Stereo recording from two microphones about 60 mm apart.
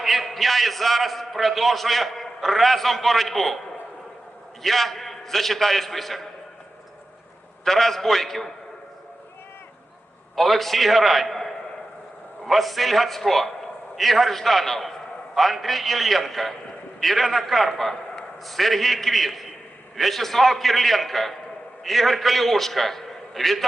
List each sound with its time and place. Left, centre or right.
0.0 s a man's voice: centre
4.6 s a man's voice: centre
7.6 s a man's voice: centre
10.3 s a man's voice: centre